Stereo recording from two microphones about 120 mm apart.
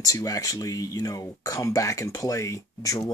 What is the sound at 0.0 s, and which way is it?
Speech, 30° left (ahead or behind).